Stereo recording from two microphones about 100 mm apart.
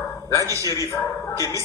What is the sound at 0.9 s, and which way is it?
Speech, 35° left (ahead or behind).